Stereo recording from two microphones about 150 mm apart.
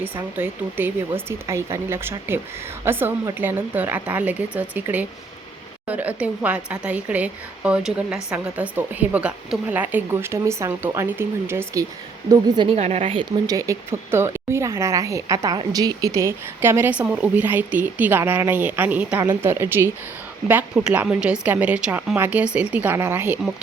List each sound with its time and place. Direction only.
0.0 s speech: 15° right (ahead or behind)
12.3 s a woman's voice: 30° right (ahead or behind)
12.7 s a woman's voice: 45° right (ahead or behind)
13.5 s speech: 20° right (ahead or behind)